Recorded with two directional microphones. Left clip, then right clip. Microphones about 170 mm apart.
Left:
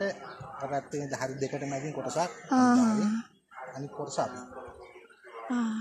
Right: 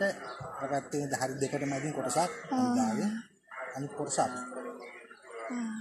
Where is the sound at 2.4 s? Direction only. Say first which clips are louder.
Left 6 dB; 70° left (ahead or behind).